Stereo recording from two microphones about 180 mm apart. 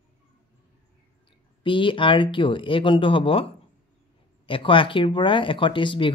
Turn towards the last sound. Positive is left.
turn(degrees=25)  # may be behind; listen again after turning